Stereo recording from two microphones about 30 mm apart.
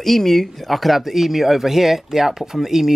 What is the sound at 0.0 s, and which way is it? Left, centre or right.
Speech, centre.